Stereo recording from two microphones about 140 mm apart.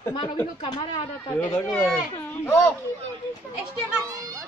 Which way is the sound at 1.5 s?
5° left (ahead or behind).